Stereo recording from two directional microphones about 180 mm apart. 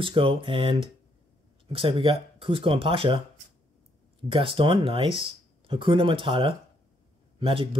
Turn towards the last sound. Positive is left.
turn(degrees=-30)  # may be behind; listen again after turning